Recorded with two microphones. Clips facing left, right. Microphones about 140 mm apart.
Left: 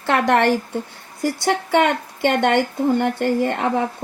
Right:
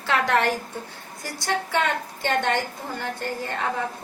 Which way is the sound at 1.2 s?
65° left (ahead or behind).